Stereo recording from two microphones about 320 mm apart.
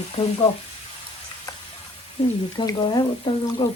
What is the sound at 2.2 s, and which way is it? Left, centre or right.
Speech, centre.